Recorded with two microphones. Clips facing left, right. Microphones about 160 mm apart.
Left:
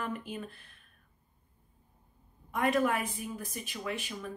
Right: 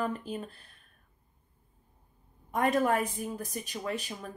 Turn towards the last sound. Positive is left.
turn(degrees=-40)  # may be behind; listen again after turning